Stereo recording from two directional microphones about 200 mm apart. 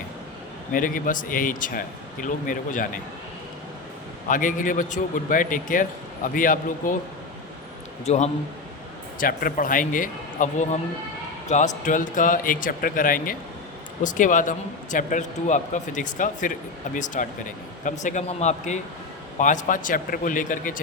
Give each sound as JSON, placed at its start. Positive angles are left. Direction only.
{"t": 0.7, "sound": "speech", "side_deg": 45}
{"t": 4.3, "sound": "speech", "side_deg": 40}
{"t": 8.0, "sound": "speech", "side_deg": 35}
{"t": 9.1, "sound": "speech", "side_deg": 45}